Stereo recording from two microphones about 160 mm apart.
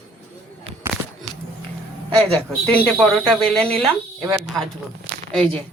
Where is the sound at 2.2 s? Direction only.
5° left (ahead or behind).